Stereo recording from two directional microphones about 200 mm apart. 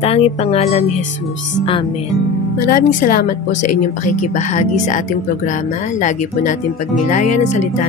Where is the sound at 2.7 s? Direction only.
40° left (ahead or behind).